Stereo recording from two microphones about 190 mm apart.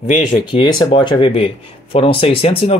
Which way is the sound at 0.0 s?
40° left (ahead or behind).